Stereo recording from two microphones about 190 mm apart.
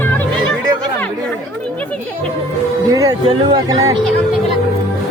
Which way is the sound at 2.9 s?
15° right (ahead or behind).